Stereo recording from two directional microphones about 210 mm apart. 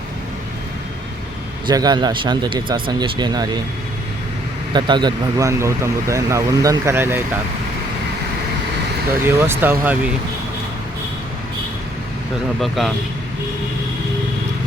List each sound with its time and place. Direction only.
1.6 s speech: 20° right (ahead or behind)
4.7 s speech: 20° right (ahead or behind)
9.2 s speech: 10° right (ahead or behind)
12.5 s speech: centre (ahead or behind)